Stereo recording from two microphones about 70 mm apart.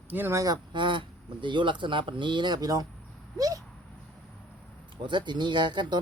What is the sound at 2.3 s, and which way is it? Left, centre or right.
Speech, right.